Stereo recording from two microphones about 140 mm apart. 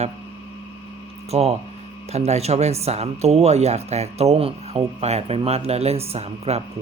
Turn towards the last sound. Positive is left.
turn(degrees=-50)  # may be behind; listen again after turning